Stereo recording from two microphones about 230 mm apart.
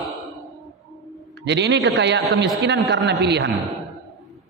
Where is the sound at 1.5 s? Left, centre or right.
Right.